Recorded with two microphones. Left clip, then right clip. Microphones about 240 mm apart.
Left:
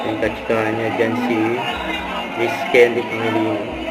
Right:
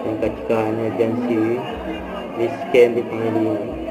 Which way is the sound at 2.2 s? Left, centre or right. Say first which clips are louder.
Left 1 dB; centre.